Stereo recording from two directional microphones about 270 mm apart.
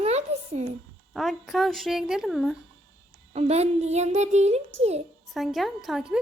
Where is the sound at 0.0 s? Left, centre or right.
Right.